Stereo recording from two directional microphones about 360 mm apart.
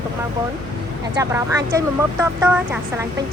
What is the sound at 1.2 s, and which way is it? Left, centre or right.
Speech, centre.